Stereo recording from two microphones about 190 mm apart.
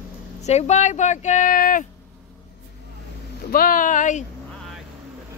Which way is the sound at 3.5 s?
50° left (ahead or behind).